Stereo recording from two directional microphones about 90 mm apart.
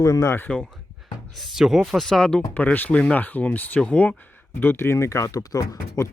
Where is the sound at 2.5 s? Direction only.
20° left (ahead or behind).